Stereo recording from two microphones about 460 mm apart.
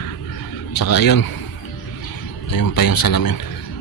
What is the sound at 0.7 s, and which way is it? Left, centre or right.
Speech, left.